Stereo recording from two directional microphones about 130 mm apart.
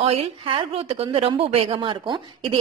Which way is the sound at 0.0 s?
50° right (ahead or behind).